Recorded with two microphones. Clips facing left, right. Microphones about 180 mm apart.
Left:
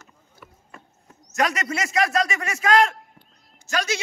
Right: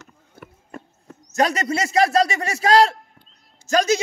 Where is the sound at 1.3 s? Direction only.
30° right (ahead or behind).